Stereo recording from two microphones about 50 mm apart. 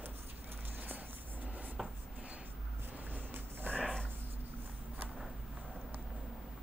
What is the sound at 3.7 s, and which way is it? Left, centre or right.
Dog, right.